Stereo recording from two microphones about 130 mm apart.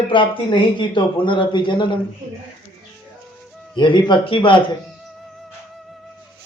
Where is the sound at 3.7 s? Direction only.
35° left (ahead or behind).